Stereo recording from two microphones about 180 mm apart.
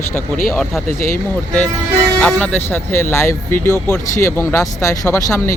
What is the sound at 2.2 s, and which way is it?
Speech, 5° left (ahead or behind).